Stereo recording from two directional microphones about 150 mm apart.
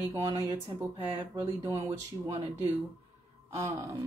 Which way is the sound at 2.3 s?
45° right (ahead or behind).